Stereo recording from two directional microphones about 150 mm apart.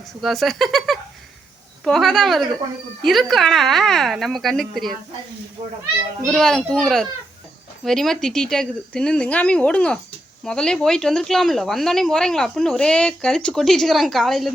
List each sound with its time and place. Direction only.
0.2 s speech: centre (ahead or behind)
6.2 s speech: 5° left (ahead or behind)